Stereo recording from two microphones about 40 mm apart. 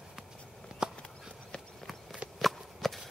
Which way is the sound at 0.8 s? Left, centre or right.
Centre.